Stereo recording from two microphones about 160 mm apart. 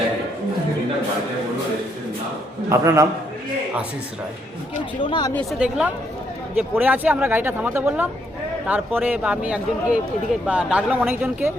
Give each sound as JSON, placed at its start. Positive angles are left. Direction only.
{"t": 2.6, "sound": "a man's voice", "side_deg": -20}
{"t": 4.9, "sound": "speech", "side_deg": 30}
{"t": 5.3, "sound": "a woman's voice", "side_deg": 5}
{"t": 5.5, "sound": "a woman's voice", "side_deg": -5}